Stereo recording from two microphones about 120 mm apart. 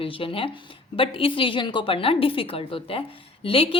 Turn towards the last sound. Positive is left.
turn(degrees=50)  # may be behind; listen again after turning